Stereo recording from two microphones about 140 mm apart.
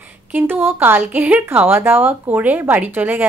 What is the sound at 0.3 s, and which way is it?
Speech, 15° right (ahead or behind).